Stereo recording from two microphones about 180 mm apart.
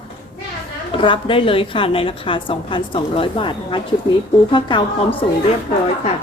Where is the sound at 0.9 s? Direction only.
30° left (ahead or behind).